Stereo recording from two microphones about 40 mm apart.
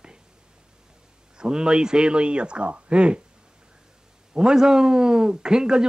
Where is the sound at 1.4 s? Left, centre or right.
Right.